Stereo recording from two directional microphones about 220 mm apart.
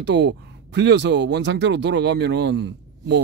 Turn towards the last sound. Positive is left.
turn(degrees=-50)  # may be behind; listen again after turning